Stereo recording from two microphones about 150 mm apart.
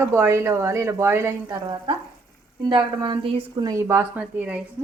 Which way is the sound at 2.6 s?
30° right (ahead or behind).